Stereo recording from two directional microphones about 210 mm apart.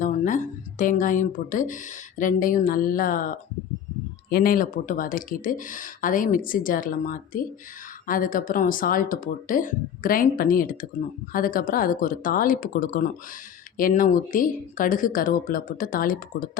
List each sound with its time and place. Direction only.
0.0 s speech: 40° left (ahead or behind)